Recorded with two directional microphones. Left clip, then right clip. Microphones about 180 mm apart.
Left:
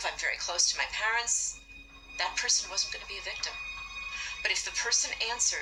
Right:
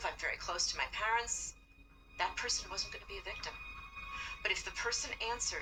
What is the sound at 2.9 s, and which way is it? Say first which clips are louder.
Speech: left 7 dB; 15° left (ahead or behind).